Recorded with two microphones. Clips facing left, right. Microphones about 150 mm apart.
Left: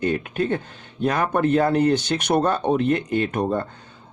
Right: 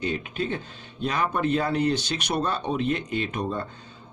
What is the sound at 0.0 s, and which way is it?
Speech, 50° left (ahead or behind).